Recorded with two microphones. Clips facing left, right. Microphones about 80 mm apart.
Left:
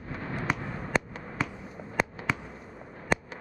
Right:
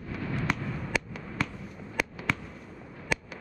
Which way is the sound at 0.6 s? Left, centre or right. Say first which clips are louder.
Left 2 dB; left.